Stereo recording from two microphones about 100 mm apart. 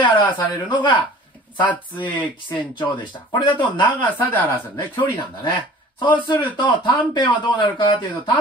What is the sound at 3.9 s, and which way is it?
Speech, 20° left (ahead or behind).